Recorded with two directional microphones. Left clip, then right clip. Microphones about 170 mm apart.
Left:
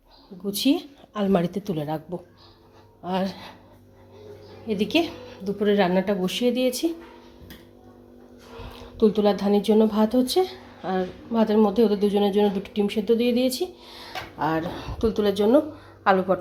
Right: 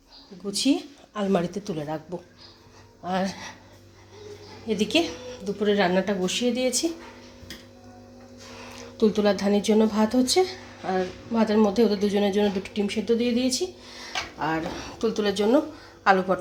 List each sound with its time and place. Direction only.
0.4 s a woman's voice: 20° left (ahead or behind)
3.0 s speech: 5° left (ahead or behind)
4.6 s speech: centre (ahead or behind)
8.8 s speech: 5° left (ahead or behind)